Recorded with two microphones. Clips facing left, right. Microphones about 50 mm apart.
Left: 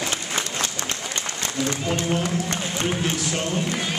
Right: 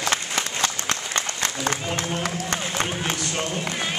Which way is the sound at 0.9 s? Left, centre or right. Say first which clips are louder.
Right 2 dB; right.